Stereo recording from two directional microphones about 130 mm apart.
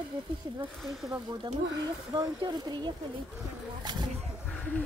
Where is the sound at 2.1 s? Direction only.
30° right (ahead or behind).